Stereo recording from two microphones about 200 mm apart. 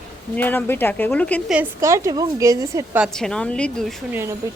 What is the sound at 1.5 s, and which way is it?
Speech, 10° right (ahead or behind).